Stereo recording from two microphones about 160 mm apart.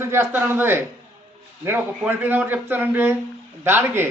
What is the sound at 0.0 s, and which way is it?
A man's voice, 15° right (ahead or behind).